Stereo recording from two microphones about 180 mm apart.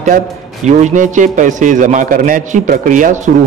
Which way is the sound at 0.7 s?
40° right (ahead or behind).